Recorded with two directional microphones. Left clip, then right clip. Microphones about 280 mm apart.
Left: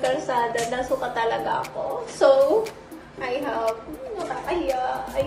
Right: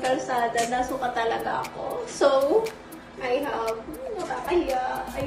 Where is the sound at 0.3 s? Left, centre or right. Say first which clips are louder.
Left 1 dB; centre.